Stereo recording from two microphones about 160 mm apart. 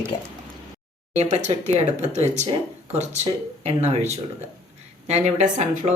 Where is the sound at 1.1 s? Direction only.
45° right (ahead or behind).